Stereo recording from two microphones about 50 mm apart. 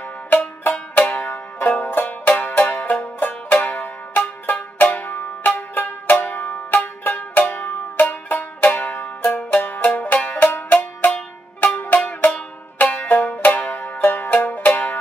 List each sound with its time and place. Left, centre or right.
0.3 s banjo: left
9.8 s music: left
10.5 s banjo: left
11.6 s music: left
13.3 s banjo: left